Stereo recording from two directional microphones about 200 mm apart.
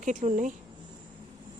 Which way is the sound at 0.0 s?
40° right (ahead or behind).